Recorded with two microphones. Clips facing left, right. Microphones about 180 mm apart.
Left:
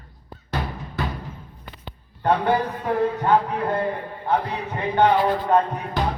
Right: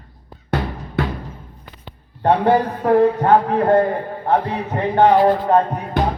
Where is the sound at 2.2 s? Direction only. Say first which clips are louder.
Right 5 dB; 30° right (ahead or behind).